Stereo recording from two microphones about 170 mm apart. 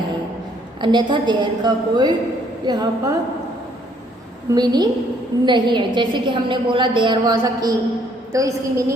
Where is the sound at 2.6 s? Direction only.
25° right (ahead or behind).